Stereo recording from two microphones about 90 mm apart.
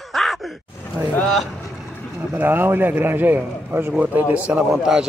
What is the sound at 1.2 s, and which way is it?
Speech, 5° left (ahead or behind).